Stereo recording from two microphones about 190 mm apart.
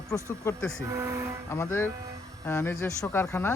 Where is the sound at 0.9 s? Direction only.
15° right (ahead or behind).